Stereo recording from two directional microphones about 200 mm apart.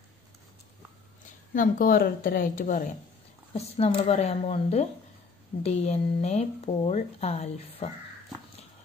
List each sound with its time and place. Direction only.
1.5 s a woman's voice: 40° left (ahead or behind)
3.5 s speech: 30° left (ahead or behind)